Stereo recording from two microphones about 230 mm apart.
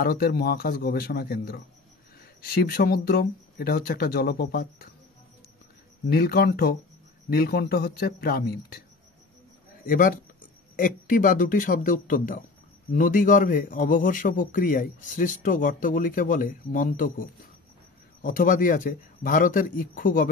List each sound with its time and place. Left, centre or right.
0.0 s a man's voice: left
6.0 s a man's voice: left
9.8 s a man's voice: left